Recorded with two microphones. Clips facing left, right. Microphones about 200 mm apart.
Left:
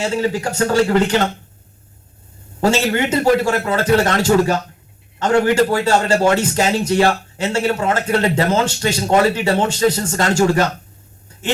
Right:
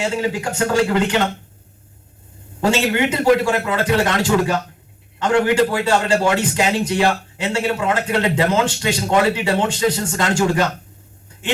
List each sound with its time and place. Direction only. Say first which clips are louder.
0.0 s a man's voice: left 2 dB; 40° left (ahead or behind)
2.6 s a man's voice: left 1 dB; 40° left (ahead or behind)